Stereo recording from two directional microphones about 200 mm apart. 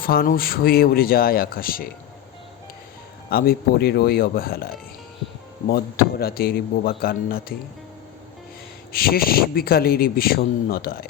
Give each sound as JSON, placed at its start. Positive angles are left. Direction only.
{"t": 0.0, "sound": "speech", "side_deg": 45}
{"t": 3.2, "sound": "speech", "side_deg": 50}
{"t": 8.9, "sound": "speech", "side_deg": 50}